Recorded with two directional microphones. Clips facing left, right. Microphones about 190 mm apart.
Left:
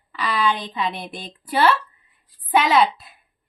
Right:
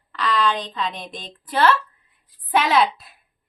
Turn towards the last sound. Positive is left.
turn(degrees=0)  # may be behind; listen again after turning